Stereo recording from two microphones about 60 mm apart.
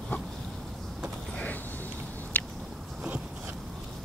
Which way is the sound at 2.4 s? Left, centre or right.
Left.